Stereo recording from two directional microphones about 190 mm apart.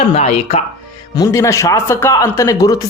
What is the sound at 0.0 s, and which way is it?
Speech, 35° left (ahead or behind).